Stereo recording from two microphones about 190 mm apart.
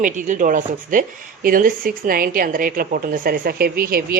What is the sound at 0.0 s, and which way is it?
Speech, 40° right (ahead or behind).